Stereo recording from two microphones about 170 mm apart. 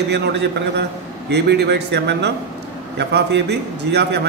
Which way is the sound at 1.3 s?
80° right.